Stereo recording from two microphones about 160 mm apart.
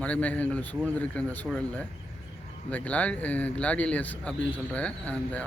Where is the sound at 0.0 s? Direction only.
10° left (ahead or behind).